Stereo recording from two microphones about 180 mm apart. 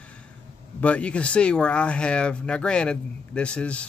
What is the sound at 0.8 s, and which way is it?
A man's voice, 5° left (ahead or behind).